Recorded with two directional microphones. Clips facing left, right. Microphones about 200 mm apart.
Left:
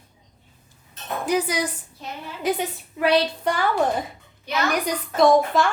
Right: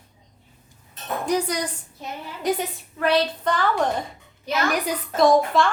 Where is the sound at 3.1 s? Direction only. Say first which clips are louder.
Even; 10° left (ahead or behind).